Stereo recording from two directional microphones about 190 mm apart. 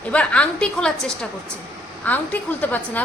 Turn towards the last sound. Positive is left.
turn(degrees=10)  # may be behind; listen again after turning